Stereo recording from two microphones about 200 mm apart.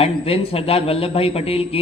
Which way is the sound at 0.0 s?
30° left (ahead or behind).